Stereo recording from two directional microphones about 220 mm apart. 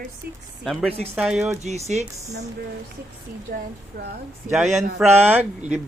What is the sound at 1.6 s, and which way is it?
Speech, 30° right (ahead or behind).